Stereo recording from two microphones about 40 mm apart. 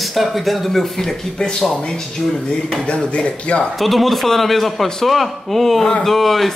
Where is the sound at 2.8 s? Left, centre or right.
Left.